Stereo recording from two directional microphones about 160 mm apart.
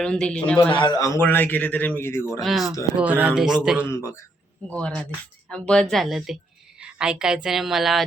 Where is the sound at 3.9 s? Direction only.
15° left (ahead or behind).